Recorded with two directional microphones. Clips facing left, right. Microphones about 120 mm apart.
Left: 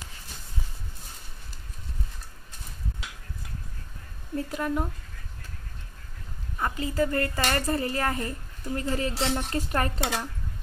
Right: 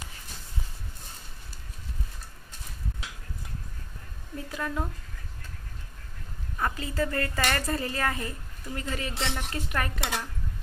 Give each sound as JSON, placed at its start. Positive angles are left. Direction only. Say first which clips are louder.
{"t": 4.5, "sound": "speech", "louder": "left 2 dB", "side_deg": 25}
{"t": 6.6, "sound": "speech", "louder": "left 3 dB", "side_deg": 25}